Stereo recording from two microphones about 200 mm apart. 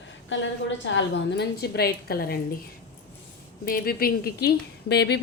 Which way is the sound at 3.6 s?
50° left (ahead or behind).